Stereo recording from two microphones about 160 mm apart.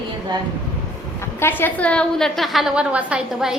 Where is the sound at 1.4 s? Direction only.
15° left (ahead or behind); by 3.5 s 5° right (ahead or behind).